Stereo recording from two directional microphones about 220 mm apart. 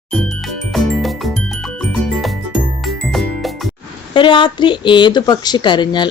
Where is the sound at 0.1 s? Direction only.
Centre (ahead or behind).